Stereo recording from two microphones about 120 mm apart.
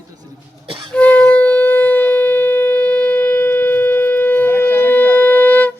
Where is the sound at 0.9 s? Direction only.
10° left (ahead or behind).